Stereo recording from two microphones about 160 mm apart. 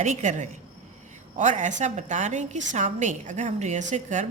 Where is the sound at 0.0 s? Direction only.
50° right (ahead or behind).